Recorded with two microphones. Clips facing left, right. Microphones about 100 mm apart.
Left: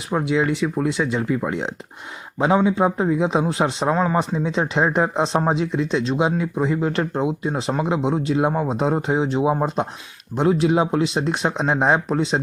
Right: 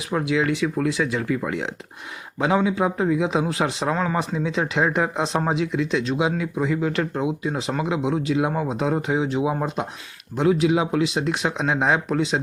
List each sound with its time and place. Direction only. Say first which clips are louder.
0.1 s speech: left 2 dB; 25° left (ahead or behind)
3.4 s a man's voice: left 3 dB; 15° left (ahead or behind)